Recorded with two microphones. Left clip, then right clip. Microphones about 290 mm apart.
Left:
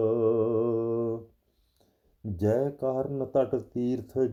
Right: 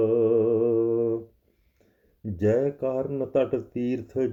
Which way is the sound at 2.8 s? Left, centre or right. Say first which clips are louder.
Right 2 dB; left.